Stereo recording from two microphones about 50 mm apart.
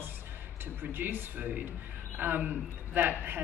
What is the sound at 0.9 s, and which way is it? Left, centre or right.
Speech, right.